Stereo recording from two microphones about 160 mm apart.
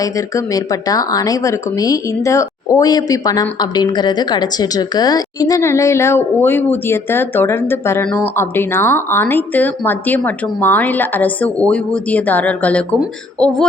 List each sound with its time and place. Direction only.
0.0 s a woman's voice: 20° left (ahead or behind)